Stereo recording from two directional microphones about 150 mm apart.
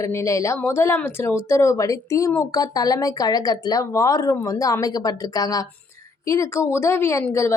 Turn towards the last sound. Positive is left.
turn(degrees=20)  # may be behind; listen again after turning